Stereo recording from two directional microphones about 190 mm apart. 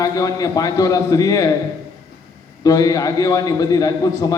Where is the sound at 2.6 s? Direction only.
20° left (ahead or behind).